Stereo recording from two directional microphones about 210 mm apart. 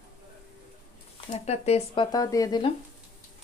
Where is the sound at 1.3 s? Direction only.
30° left (ahead or behind).